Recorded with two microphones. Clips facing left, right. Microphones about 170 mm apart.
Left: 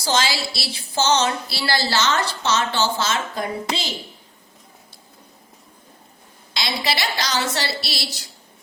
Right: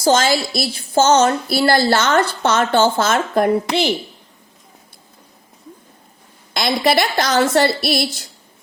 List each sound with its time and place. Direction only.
0.0 s a woman's voice: 50° right (ahead or behind)
6.5 s a woman's voice: 50° right (ahead or behind)